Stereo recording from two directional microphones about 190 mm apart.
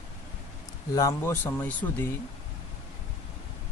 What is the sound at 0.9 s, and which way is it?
Speech, 15° left (ahead or behind).